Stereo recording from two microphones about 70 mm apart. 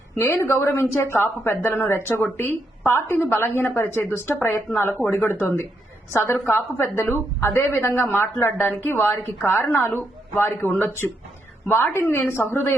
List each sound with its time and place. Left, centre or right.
0.2 s speech: left
4.8 s speech: left
6.6 s speech: left
7.0 s speech: left